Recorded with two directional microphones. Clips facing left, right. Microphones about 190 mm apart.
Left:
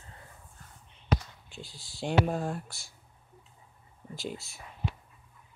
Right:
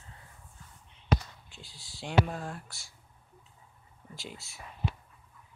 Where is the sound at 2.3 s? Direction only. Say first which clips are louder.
Left 6 dB; 25° left (ahead or behind).